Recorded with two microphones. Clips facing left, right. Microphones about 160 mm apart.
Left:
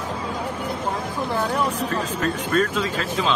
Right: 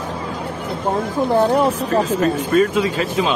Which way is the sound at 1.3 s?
40° right (ahead or behind).